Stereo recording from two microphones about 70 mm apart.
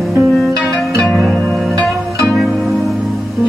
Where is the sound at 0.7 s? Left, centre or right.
Centre.